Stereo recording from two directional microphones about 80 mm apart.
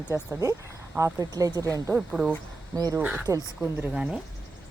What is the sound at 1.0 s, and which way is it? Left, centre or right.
Speech, right.